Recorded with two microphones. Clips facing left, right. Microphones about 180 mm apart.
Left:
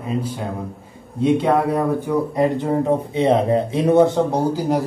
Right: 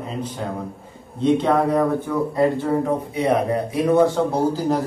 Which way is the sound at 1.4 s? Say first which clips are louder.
Even; 15° left (ahead or behind).